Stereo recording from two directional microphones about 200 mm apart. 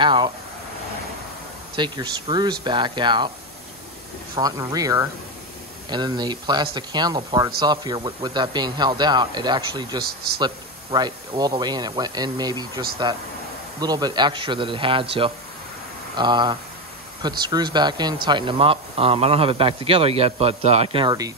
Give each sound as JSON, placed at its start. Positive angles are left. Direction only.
{"t": 0.0, "sound": "speech", "side_deg": -25}
{"t": 1.8, "sound": "speech", "side_deg": -20}
{"t": 4.4, "sound": "speech", "side_deg": -20}
{"t": 10.0, "sound": "speech", "side_deg": -50}
{"t": 10.4, "sound": "speech", "side_deg": -20}